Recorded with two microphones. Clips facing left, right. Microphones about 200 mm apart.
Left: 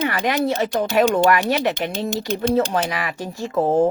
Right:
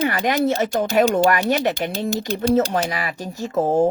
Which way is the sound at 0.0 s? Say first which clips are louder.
Right 1 dB; 40° right (ahead or behind).